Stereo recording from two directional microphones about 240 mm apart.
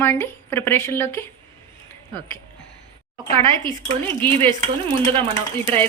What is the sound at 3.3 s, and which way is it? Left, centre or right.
Speech, centre.